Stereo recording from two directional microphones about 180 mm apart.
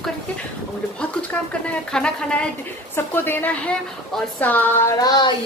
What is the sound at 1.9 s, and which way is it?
A woman's voice, 5° left (ahead or behind).